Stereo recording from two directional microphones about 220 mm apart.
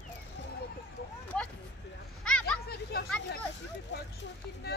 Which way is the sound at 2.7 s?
45° left (ahead or behind).